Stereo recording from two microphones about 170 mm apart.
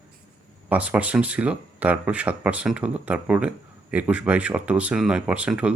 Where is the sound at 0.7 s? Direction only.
10° right (ahead or behind).